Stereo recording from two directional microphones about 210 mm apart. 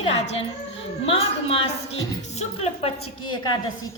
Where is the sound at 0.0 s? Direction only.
30° left (ahead or behind).